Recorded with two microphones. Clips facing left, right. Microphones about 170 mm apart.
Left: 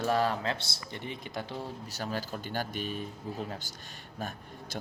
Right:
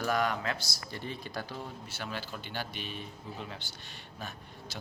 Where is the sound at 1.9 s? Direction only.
40° left (ahead or behind).